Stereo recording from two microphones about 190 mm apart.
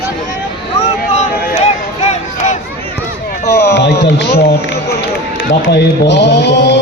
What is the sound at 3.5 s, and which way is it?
Speech, 60° left (ahead or behind).